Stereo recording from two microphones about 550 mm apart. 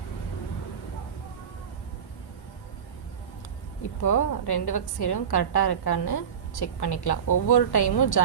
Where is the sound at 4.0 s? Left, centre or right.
Left.